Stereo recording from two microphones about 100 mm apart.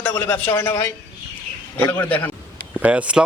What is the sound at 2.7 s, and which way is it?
Speech, 15° right (ahead or behind).